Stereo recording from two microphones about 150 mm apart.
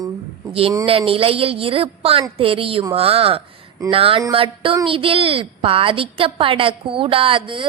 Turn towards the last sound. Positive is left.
turn(degrees=-35)  # may be behind; listen again after turning